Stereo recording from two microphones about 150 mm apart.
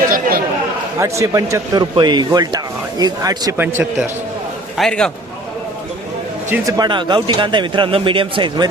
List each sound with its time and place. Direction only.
0.1 s chatter: 75° right (ahead or behind)
0.9 s speech: 20° right (ahead or behind)
3.6 s a man's voice: 15° right (ahead or behind)
4.8 s a man's voice: 5° left (ahead or behind)
6.5 s speech: 25° right (ahead or behind)